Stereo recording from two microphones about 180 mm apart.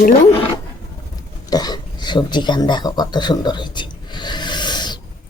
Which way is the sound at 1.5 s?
20° left (ahead or behind).